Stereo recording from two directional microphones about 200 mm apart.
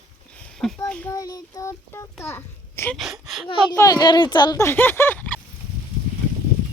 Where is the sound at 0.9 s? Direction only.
5° left (ahead or behind).